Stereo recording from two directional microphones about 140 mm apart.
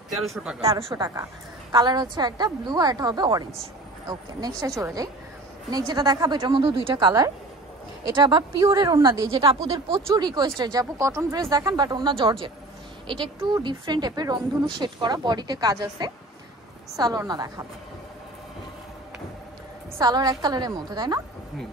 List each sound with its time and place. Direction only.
0.1 s speech: centre (ahead or behind)
0.7 s speech: 40° right (ahead or behind); by 9.2 s 25° right (ahead or behind)
9.2 s speech: 40° right (ahead or behind)
10.0 s speech: 30° right (ahead or behind)
20.0 s speech: 30° right (ahead or behind)